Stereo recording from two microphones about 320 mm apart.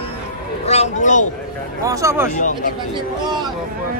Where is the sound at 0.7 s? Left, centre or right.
Left.